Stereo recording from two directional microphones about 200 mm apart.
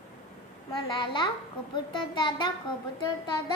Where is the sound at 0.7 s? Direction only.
25° left (ahead or behind).